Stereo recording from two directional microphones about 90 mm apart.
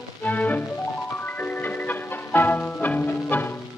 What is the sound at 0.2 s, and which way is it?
Music, 15° left (ahead or behind).